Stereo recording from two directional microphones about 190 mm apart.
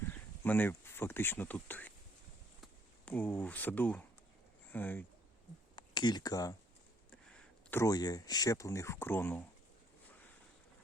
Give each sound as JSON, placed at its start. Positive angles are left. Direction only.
{"t": 0.4, "sound": "speech", "side_deg": 10}
{"t": 3.1, "sound": "speech", "side_deg": 10}
{"t": 5.7, "sound": "speech", "side_deg": 25}